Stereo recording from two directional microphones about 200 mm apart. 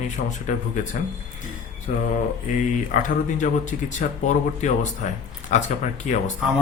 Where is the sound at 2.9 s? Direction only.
40° left (ahead or behind).